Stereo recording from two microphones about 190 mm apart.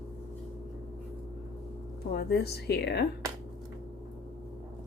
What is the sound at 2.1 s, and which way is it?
Speech, 60° left (ahead or behind).